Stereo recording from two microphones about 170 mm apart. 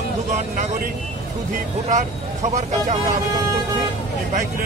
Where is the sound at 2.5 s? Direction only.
45° right (ahead or behind).